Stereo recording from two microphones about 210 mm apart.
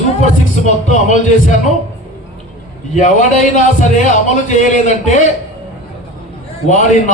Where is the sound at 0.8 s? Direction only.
35° left (ahead or behind).